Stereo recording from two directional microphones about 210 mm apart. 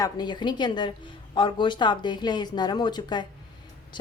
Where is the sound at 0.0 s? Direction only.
20° left (ahead or behind).